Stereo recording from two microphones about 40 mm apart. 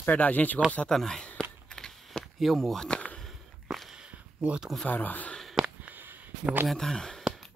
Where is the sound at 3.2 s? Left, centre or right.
Centre.